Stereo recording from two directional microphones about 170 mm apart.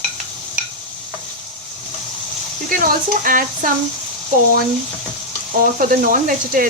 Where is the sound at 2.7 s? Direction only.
55° right (ahead or behind).